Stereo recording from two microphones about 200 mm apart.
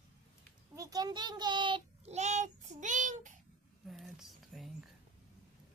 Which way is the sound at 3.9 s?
Centre (ahead or behind).